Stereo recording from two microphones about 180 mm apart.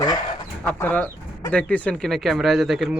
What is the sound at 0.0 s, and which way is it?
Dog, 25° left (ahead or behind).